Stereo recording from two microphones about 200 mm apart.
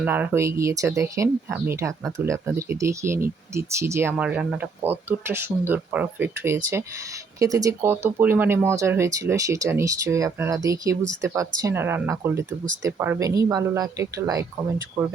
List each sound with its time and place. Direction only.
0.0 s speech: 10° right (ahead or behind)